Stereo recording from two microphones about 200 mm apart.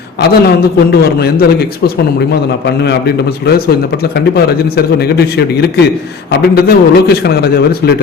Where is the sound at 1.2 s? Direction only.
50° left (ahead or behind).